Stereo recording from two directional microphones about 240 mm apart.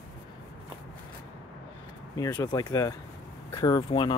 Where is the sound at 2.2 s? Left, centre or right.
Centre.